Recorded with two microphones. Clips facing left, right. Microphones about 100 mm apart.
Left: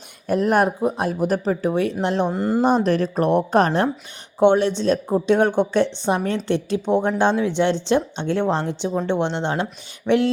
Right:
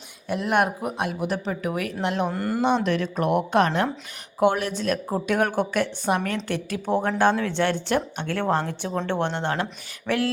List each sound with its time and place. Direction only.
0.3 s speech: 40° left (ahead or behind)
2.3 s a woman's voice: 20° left (ahead or behind)
2.6 s a woman's voice: 40° left (ahead or behind)